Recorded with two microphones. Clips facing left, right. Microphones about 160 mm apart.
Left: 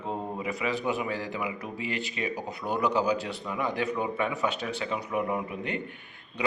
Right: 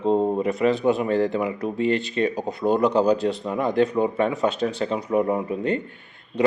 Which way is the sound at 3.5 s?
35° right (ahead or behind).